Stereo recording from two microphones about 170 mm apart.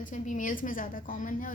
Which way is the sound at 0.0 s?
50° left (ahead or behind).